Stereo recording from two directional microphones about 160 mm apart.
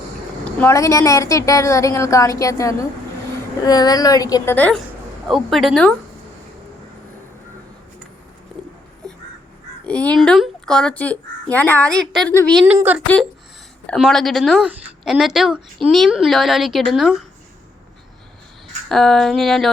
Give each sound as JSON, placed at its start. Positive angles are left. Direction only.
{"t": 0.7, "sound": "a woman's voice", "side_deg": 20}
{"t": 4.5, "sound": "speech", "side_deg": 10}
{"t": 5.3, "sound": "a woman's voice", "side_deg": 0}
{"t": 9.0, "sound": "crow", "side_deg": 5}
{"t": 9.8, "sound": "speech", "side_deg": 10}
{"t": 12.6, "sound": "speech", "side_deg": -10}
{"t": 13.8, "sound": "a woman's voice", "side_deg": 0}
{"t": 18.9, "sound": "a woman's voice", "side_deg": 5}